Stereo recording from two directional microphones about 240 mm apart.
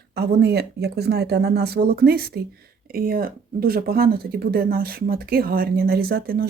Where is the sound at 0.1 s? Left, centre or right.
Right.